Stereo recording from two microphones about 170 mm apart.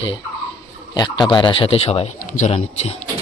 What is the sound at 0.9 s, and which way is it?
A man's voice, 25° left (ahead or behind).